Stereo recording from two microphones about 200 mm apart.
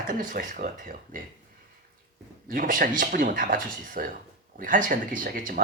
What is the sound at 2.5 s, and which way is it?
Speech, 45° right (ahead or behind).